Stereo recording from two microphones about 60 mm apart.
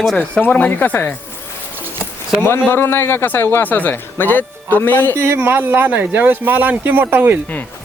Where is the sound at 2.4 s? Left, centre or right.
Left.